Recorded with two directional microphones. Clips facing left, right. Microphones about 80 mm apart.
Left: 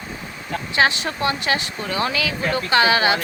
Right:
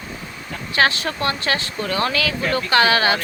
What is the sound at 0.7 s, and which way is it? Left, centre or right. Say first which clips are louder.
Speech: right 1 dB; centre.